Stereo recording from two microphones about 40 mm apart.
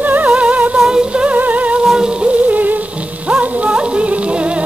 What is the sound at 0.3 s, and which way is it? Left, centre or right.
Humming, right.